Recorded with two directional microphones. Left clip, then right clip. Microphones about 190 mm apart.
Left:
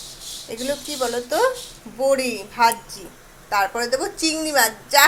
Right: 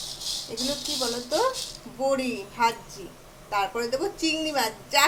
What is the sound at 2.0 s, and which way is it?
A woman's voice, 15° left (ahead or behind).